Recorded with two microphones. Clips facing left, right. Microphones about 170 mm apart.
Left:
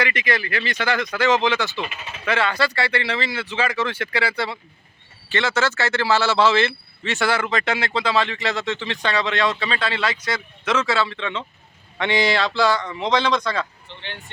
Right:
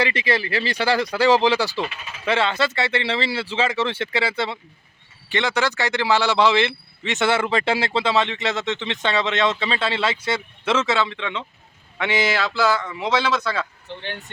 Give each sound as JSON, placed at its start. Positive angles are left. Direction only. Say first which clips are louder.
{"t": 0.0, "sound": "a man's voice", "louder": "right 2 dB", "side_deg": -30}